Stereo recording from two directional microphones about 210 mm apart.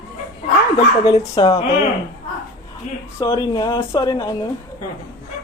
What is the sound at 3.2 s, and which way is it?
Speech, 20° left (ahead or behind).